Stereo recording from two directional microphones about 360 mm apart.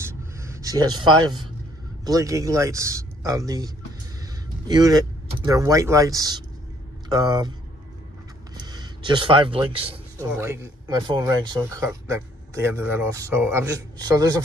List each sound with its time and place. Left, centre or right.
0.0 s a sound: centre
2.0 s speech: centre
8.6 s speech: centre